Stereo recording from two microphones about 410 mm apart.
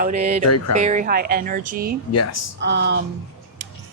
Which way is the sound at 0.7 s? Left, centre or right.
Centre.